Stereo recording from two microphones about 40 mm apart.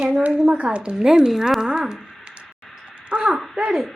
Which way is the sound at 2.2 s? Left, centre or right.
Right.